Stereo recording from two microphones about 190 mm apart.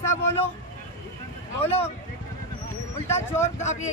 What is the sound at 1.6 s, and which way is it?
Speech, 35° left (ahead or behind).